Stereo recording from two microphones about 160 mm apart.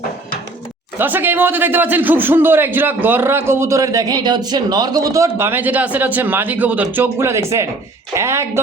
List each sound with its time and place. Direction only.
0.9 s a man's voice: 10° right (ahead or behind)